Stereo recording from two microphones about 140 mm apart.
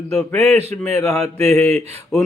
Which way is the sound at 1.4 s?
20° left (ahead or behind).